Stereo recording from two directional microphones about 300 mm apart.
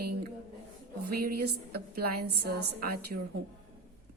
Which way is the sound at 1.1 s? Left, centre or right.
Right.